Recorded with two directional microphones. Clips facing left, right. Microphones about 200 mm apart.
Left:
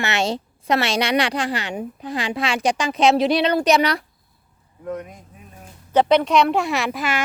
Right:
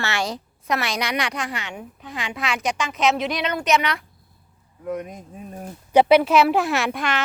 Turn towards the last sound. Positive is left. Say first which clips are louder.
# even
turn(degrees=5)  # may be behind; listen again after turning